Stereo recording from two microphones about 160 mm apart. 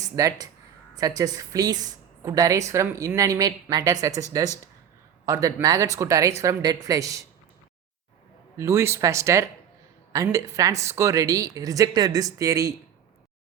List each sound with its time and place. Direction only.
0.0 s speech: 20° right (ahead or behind)
8.5 s speech: 15° right (ahead or behind)